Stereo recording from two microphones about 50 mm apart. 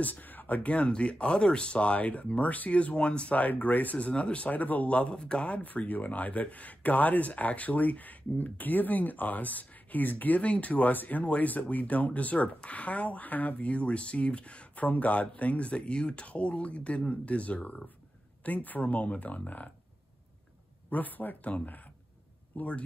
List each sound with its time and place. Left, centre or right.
0.0 s speech: left
0.6 s speech: left
20.9 s speech: left